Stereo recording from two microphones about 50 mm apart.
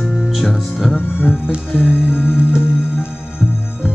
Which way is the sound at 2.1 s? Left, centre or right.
Left.